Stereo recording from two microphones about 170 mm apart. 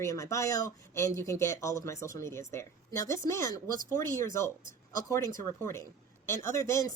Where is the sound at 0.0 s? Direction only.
20° left (ahead or behind).